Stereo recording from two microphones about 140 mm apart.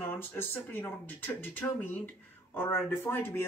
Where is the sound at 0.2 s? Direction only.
15° left (ahead or behind).